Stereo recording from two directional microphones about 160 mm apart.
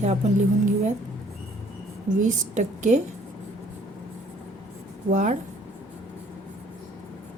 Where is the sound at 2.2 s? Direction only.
50° right (ahead or behind).